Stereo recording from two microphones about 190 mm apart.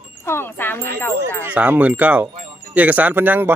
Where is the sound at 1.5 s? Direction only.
10° right (ahead or behind).